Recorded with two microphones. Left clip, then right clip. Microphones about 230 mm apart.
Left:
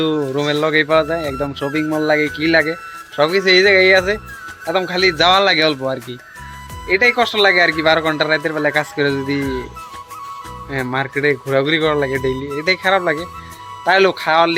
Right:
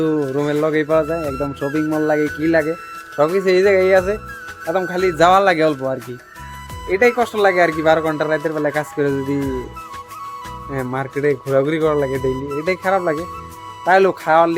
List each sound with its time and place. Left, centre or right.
0.0 s speech: centre
6.8 s speech: centre
10.7 s speech: centre